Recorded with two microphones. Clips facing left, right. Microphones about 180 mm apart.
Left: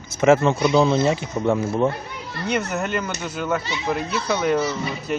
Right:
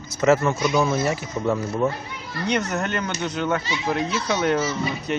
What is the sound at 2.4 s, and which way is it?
Speech, 5° left (ahead or behind).